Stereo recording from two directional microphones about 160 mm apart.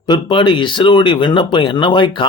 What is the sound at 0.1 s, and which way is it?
Speech, 30° left (ahead or behind).